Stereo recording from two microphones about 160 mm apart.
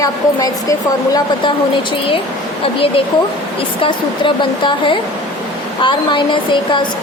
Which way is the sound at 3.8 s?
30° left (ahead or behind).